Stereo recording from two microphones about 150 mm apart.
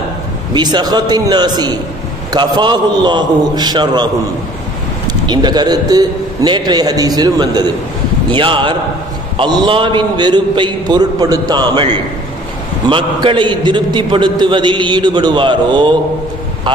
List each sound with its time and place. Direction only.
0.6 s a man's voice: 30° right (ahead or behind)
5.3 s a man's voice: 30° right (ahead or behind)